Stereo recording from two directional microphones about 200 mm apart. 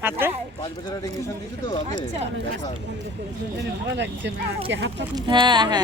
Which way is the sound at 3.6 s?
60° right (ahead or behind).